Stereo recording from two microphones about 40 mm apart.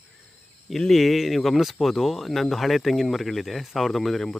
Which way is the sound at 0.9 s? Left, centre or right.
Centre.